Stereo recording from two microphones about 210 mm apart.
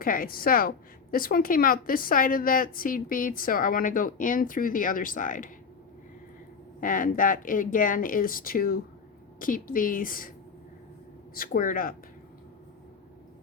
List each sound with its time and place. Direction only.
0.0 s a woman's voice: 40° left (ahead or behind)
6.7 s a woman's voice: 40° left (ahead or behind)
11.3 s speech: 40° left (ahead or behind)